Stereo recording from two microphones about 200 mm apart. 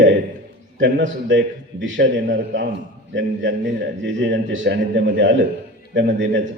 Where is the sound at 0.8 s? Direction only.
60° right (ahead or behind).